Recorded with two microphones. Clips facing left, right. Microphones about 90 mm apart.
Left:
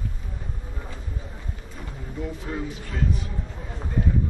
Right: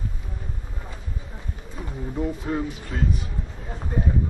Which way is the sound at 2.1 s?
30° right (ahead or behind).